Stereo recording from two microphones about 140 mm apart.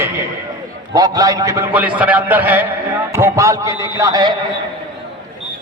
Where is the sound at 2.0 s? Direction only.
10° right (ahead or behind); by 4.3 s 25° right (ahead or behind).